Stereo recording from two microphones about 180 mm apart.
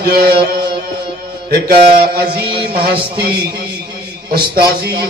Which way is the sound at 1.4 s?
55° right (ahead or behind).